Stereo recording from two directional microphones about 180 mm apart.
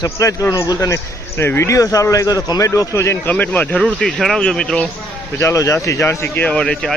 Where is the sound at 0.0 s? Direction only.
20° left (ahead or behind).